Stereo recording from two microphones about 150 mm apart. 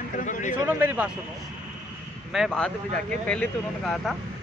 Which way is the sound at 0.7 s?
10° right (ahead or behind).